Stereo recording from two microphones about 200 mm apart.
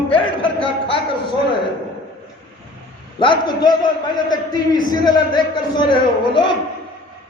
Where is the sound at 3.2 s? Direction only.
20° left (ahead or behind).